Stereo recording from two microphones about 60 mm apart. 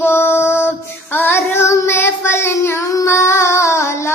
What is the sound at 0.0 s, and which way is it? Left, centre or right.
Music, left.